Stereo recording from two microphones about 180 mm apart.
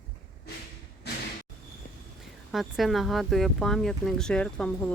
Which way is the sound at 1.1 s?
70° left (ahead or behind).